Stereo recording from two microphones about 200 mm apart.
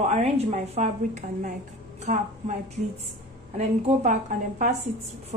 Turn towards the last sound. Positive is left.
turn(degrees=-40)  # may be behind; listen again after turning